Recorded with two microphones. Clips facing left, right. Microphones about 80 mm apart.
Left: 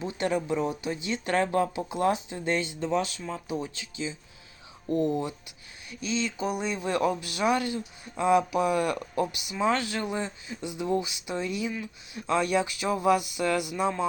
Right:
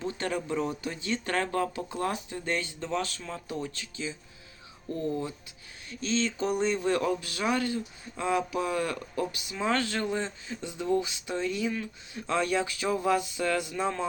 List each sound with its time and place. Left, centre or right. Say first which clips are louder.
0.0 s speech: left 3 dB; centre
6.9 s speech: left 1 dB; centre